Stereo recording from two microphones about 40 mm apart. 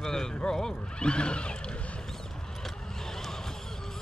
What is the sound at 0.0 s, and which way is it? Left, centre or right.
Horse, centre.